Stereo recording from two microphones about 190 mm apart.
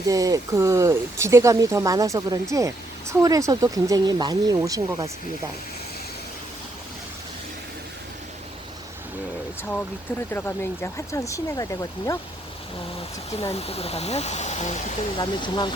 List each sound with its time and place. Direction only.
0.1 s speech: 20° right (ahead or behind)
10.3 s speech: 10° left (ahead or behind)
13.4 s speech: 30° left (ahead or behind)
15.2 s speech: 25° left (ahead or behind)